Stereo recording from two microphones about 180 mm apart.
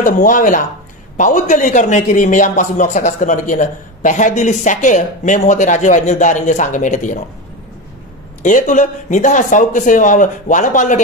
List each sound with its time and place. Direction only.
0.0 s a man's voice: 50° left (ahead or behind)
8.4 s a man's voice: 45° left (ahead or behind)